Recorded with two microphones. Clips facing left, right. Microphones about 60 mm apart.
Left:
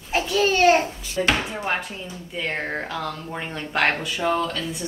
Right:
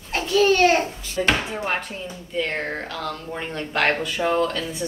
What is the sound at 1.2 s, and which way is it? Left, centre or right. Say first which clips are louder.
Chopping: right 1 dB; centre.